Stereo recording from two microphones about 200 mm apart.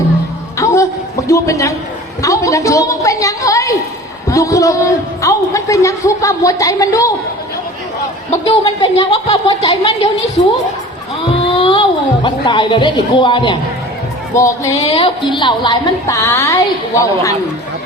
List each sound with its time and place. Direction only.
0.6 s a sound: 15° left (ahead or behind)
1.3 s a man's voice: 15° left (ahead or behind)
8.4 s a woman's voice: 30° left (ahead or behind)
11.5 s a woman's voice: 25° left (ahead or behind)
14.8 s a woman's voice: 30° left (ahead or behind); by 17.3 s 15° left (ahead or behind)